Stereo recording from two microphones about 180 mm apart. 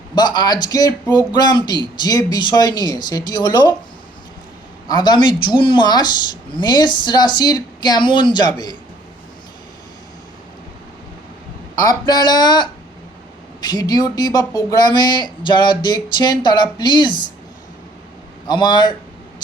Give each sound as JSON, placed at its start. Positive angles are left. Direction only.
{"t": 0.2, "sound": "speech", "side_deg": 25}
{"t": 4.9, "sound": "speech", "side_deg": 25}
{"t": 11.8, "sound": "speech", "side_deg": 20}
{"t": 18.4, "sound": "speech", "side_deg": 25}